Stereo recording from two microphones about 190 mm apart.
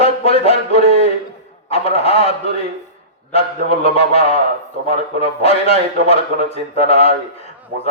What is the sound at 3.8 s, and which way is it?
A man's voice, 30° left (ahead or behind).